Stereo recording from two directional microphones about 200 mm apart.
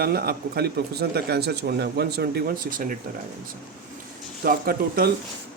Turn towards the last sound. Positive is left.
turn(degrees=-50)  # may be behind; listen again after turning